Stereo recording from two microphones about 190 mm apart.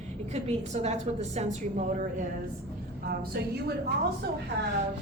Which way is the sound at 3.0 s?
55° right (ahead or behind).